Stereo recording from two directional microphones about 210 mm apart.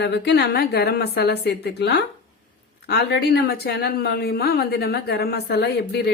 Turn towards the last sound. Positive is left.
turn(degrees=50)  # may be behind; listen again after turning